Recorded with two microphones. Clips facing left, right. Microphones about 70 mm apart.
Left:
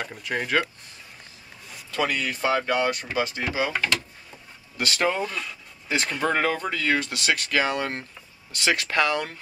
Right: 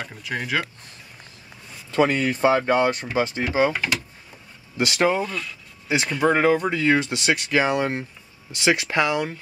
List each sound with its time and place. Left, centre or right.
0.0 s speech: centre
1.9 s speech: right
3.7 s speech: centre
5.2 s speech: centre
5.9 s speech: centre